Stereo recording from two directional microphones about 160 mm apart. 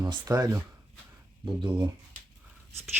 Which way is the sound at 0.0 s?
20° right (ahead or behind).